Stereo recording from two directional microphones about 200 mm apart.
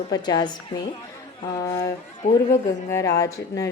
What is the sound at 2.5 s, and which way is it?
A woman's voice, 15° left (ahead or behind).